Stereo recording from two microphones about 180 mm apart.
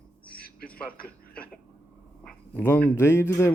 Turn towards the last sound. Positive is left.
turn(degrees=15)  # may be behind; listen again after turning